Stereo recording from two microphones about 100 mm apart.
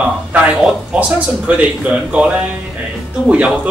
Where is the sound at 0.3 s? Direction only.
15° right (ahead or behind).